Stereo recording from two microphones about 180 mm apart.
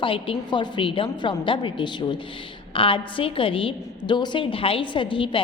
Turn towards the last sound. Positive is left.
turn(degrees=30)  # may be behind; listen again after turning